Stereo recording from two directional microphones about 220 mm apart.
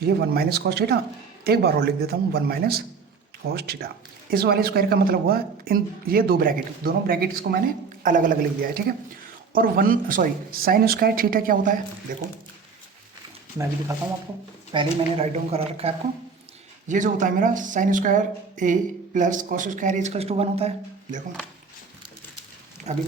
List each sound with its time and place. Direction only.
0.0 s speech: 45° right (ahead or behind)
14.7 s speech: 25° right (ahead or behind)
22.9 s speech: 30° right (ahead or behind)